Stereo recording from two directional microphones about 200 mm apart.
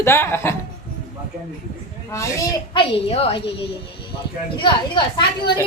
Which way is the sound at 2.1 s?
15° left (ahead or behind).